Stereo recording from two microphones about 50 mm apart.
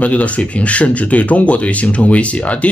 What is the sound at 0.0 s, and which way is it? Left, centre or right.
A man's voice, left.